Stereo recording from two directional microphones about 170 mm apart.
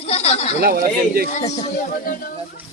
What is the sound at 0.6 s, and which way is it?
Speech, 60° right (ahead or behind).